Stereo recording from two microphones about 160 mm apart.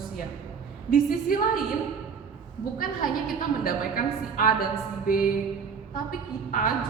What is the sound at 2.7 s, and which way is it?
A woman's voice, 60° left (ahead or behind).